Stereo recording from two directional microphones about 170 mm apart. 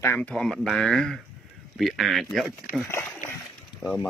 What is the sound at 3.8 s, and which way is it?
Speech, 25° left (ahead or behind).